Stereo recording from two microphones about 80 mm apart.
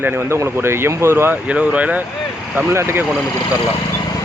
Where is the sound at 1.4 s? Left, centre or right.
Centre.